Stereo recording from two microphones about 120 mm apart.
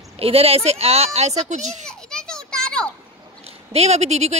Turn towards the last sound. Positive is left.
turn(degrees=-65)  # may be behind; listen again after turning